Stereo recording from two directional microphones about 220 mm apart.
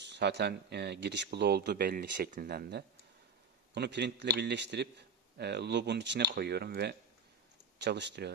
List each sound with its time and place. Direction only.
0.0 s speech: 50° right (ahead or behind)